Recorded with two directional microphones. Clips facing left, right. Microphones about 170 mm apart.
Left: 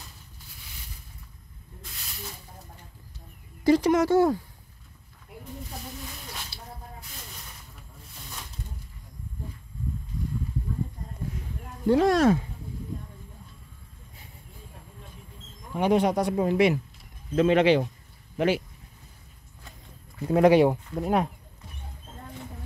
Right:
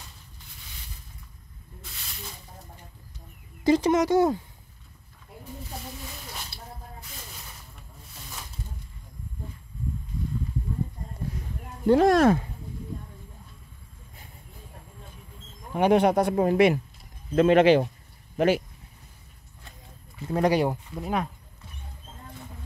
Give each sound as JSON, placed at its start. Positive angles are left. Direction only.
{"t": 3.6, "sound": "speech", "side_deg": -20}
{"t": 11.9, "sound": "speech", "side_deg": -50}
{"t": 15.8, "sound": "speech", "side_deg": -60}
{"t": 20.3, "sound": "speech", "side_deg": 0}